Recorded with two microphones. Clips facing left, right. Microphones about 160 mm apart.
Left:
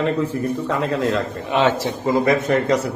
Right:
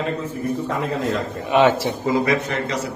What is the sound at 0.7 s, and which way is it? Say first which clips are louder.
Speech: left 5 dB; 85° left.